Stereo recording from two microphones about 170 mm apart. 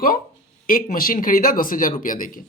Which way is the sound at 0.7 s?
55° left (ahead or behind).